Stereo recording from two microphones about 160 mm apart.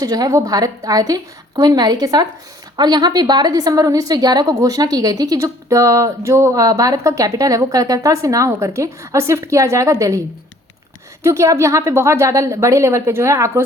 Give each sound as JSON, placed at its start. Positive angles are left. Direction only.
{"t": 0.0, "sound": "speech", "side_deg": -25}
{"t": 11.2, "sound": "a woman's voice", "side_deg": -15}